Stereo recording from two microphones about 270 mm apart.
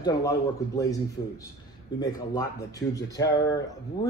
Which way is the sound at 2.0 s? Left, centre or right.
Centre.